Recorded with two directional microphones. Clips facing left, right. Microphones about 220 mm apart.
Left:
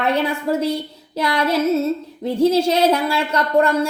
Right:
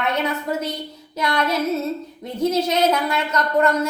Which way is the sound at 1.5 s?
30° left (ahead or behind).